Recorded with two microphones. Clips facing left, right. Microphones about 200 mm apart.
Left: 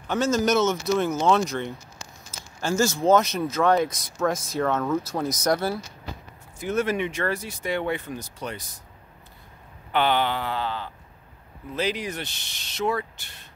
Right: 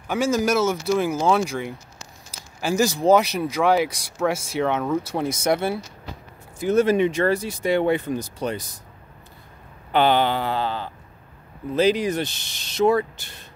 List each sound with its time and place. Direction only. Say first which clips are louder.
0.1 s speech: right 1 dB; 10° right (ahead or behind)
5.3 s speech: right 2 dB; 25° right (ahead or behind)
9.9 s speech: right 4 dB; 35° right (ahead or behind)